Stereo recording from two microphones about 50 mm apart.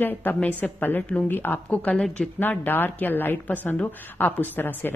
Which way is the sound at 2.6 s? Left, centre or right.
Left.